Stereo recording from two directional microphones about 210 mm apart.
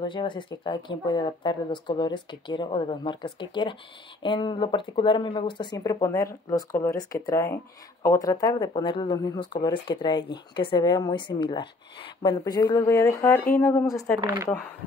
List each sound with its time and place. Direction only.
0.0 s speech: 20° left (ahead or behind)
14.2 s speech: 15° right (ahead or behind)